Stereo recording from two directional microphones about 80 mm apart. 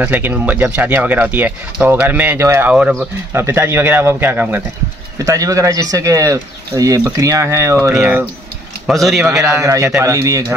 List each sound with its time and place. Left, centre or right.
0.0 s speech: centre
5.2 s speech: right
8.0 s speech: right
8.9 s a man's voice: centre
9.6 s speech: right